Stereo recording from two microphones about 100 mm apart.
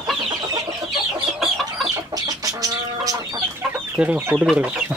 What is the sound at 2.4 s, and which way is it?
Chicken, 35° right (ahead or behind).